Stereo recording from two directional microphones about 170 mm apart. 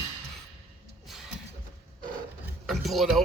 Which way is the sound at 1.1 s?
Centre (ahead or behind).